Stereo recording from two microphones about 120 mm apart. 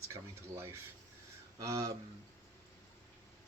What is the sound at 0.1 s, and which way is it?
Speech, 25° right (ahead or behind).